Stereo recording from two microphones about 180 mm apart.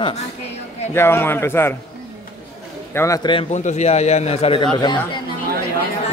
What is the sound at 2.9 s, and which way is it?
Speech, 15° left (ahead or behind).